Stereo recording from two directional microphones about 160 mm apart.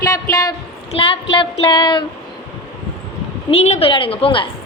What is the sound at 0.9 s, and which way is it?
A woman's voice, 30° left (ahead or behind).